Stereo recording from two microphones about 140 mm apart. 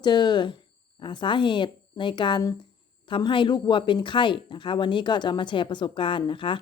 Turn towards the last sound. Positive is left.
turn(degrees=35)  # may be behind; listen again after turning